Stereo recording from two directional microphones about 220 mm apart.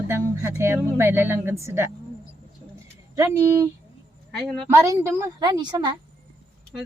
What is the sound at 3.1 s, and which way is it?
Speech, 10° right (ahead or behind).